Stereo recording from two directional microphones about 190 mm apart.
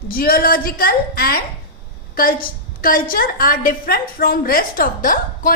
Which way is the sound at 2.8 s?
50° left (ahead or behind).